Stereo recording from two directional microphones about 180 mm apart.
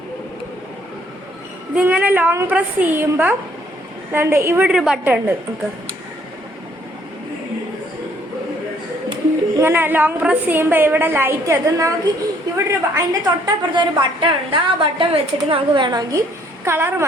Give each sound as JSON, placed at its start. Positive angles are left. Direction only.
{"t": 1.7, "sound": "a woman's voice", "side_deg": -5}
{"t": 9.6, "sound": "a woman's voice", "side_deg": -10}